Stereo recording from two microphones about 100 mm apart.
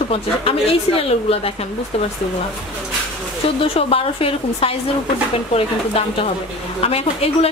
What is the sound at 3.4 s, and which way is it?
A woman's voice, 70° left (ahead or behind).